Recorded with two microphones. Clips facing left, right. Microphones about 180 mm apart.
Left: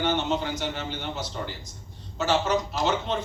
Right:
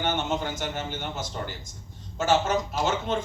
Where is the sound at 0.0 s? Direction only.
50° right (ahead or behind).